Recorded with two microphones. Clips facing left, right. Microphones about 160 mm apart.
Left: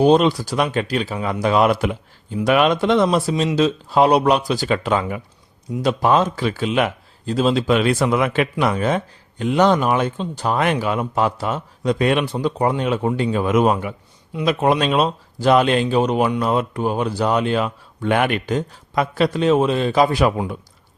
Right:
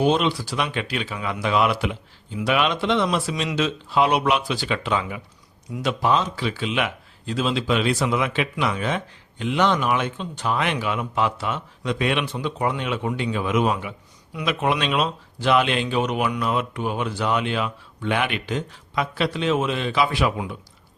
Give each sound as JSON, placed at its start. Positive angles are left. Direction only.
{"t": 0.0, "sound": "speech", "side_deg": 40}
{"t": 6.1, "sound": "speech", "side_deg": 50}